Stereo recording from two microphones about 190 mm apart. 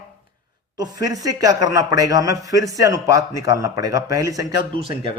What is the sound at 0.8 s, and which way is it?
Speech, 20° right (ahead or behind).